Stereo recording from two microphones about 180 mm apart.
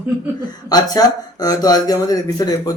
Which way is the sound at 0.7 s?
20° left (ahead or behind).